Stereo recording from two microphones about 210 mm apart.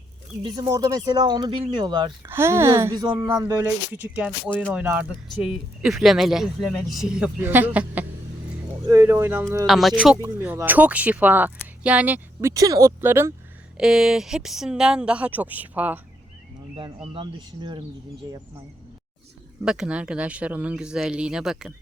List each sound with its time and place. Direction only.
0.4 s speech: 15° right (ahead or behind)
9.6 s speech: centre (ahead or behind)
16.7 s speech: 25° right (ahead or behind)
19.6 s speech: 5° right (ahead or behind)